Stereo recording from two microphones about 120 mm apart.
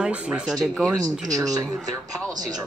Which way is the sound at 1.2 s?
30° right (ahead or behind).